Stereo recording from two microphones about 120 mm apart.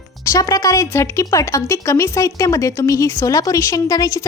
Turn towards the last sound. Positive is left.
turn(degrees=30)  # may be behind; listen again after turning